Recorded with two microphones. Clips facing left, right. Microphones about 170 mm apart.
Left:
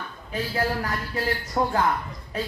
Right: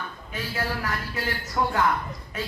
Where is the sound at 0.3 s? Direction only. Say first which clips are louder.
Left 4 dB; 30° left (ahead or behind).